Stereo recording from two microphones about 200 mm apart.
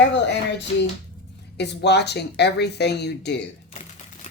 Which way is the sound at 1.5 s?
60° left (ahead or behind).